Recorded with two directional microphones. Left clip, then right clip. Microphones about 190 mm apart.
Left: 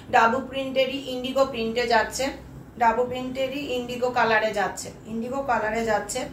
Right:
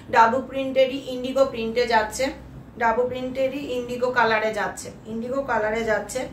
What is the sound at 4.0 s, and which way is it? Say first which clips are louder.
Speech: right 2 dB; 20° right (ahead or behind).